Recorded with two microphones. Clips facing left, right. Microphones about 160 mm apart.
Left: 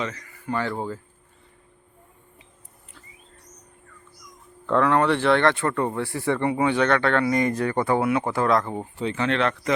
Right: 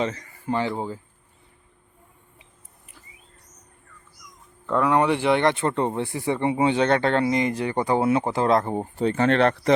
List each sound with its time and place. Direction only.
0.0 s speech: 30° right (ahead or behind)
4.6 s speech: 5° right (ahead or behind); by 9.7 s 40° right (ahead or behind)